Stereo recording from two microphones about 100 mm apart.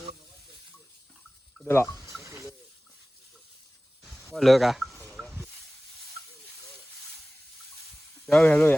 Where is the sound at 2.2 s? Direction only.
30° right (ahead or behind).